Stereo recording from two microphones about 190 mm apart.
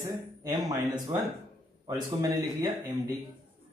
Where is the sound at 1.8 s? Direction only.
20° right (ahead or behind).